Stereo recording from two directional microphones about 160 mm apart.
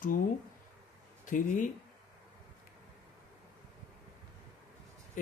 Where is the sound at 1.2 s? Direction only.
55° left (ahead or behind).